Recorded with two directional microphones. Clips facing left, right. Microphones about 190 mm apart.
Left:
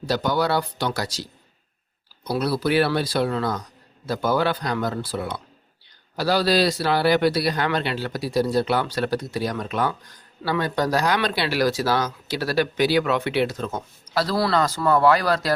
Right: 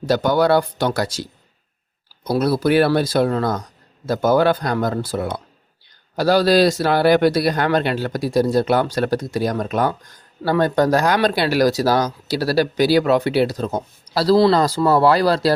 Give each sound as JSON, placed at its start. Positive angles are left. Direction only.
{"t": 0.0, "sound": "a man's voice", "side_deg": -50}